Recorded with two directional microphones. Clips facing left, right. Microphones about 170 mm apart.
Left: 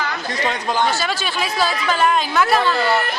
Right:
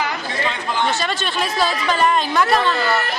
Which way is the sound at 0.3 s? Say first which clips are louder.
Left 2 dB; 40° left (ahead or behind).